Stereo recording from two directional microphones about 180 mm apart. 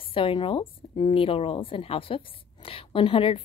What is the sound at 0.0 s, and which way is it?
A woman's voice, 30° left (ahead or behind).